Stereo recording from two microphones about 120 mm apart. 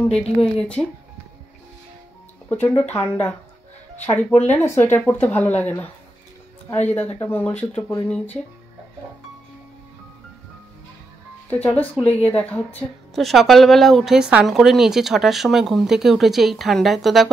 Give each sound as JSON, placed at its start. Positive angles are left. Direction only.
{"t": 0.0, "sound": "speech", "side_deg": 5}
{"t": 2.5, "sound": "speech", "side_deg": 15}
{"t": 6.9, "sound": "speech", "side_deg": 15}
{"t": 11.5, "sound": "speech", "side_deg": 10}
{"t": 13.1, "sound": "a woman's voice", "side_deg": 0}